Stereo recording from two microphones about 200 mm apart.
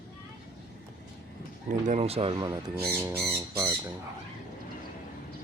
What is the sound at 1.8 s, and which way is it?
Speech, 35° right (ahead or behind).